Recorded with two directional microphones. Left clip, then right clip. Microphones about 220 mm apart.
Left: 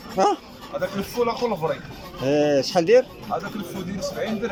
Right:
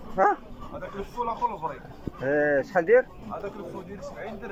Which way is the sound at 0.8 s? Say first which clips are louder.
Left 8 dB; 50° left (ahead or behind).